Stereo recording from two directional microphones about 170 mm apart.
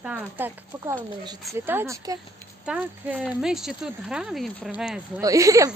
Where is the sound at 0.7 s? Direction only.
25° right (ahead or behind).